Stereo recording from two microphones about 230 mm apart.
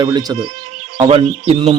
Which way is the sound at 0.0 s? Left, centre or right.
Centre.